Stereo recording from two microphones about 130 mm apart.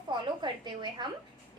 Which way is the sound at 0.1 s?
35° right (ahead or behind).